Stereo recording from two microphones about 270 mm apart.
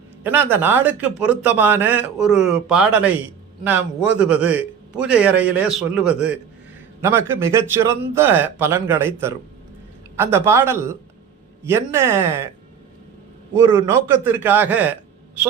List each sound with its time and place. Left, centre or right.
0.2 s a man's voice: centre
13.5 s speech: centre